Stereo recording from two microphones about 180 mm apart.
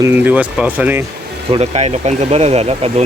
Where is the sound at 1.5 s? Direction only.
35° right (ahead or behind).